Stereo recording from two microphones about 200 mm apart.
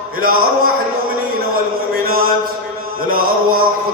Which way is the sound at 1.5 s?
45° right (ahead or behind).